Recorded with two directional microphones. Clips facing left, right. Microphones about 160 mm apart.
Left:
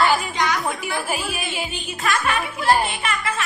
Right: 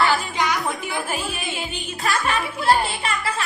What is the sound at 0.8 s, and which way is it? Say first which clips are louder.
Speech: left 1 dB; 10° left (ahead or behind).